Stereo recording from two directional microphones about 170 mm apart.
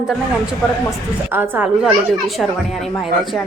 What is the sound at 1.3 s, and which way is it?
Speech, 10° right (ahead or behind).